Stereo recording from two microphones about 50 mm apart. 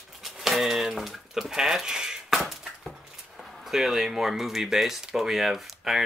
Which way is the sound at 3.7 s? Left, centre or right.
Centre.